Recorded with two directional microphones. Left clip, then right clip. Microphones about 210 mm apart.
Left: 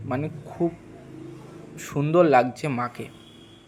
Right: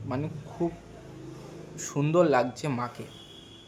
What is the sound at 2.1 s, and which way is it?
Speech, 15° left (ahead or behind).